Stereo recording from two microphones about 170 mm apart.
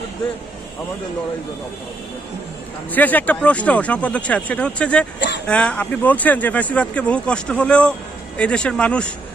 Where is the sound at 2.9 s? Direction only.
10° left (ahead or behind).